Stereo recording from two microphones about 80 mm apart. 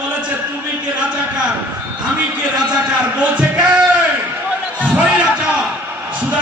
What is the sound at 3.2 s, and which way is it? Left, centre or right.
Music, centre.